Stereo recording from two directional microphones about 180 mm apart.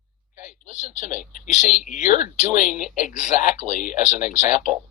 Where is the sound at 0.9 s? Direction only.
45° left (ahead or behind).